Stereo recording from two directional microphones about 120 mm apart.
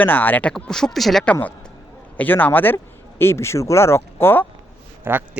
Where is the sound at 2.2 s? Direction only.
15° left (ahead or behind).